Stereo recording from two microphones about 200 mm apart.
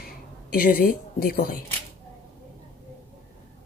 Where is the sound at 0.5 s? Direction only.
45° left (ahead or behind).